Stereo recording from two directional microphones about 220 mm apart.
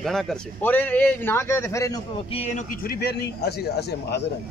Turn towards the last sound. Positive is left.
turn(degrees=50)  # may be behind; listen again after turning